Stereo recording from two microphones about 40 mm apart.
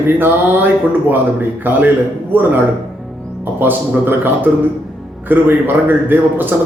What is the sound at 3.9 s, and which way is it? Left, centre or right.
A man's voice, right.